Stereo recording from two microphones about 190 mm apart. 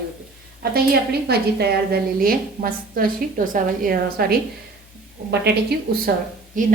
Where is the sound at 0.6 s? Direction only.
55° right (ahead or behind).